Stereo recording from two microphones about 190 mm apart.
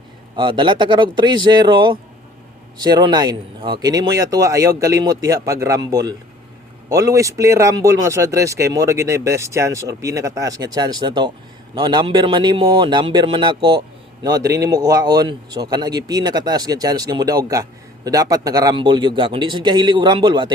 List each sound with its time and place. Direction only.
0.3 s speech: 25° right (ahead or behind)